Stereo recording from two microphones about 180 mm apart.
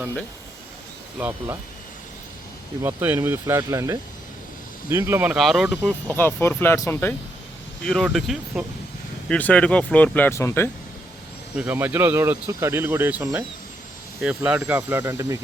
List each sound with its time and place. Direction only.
1.2 s speech: 10° right (ahead or behind)
2.8 s speech: 10° right (ahead or behind)
6.1 s speech: 10° left (ahead or behind)
7.9 s speech: centre (ahead or behind)
11.5 s speech: 10° right (ahead or behind)